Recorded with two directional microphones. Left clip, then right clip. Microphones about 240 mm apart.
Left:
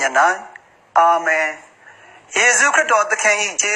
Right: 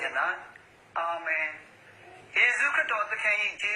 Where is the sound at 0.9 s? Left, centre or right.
Left.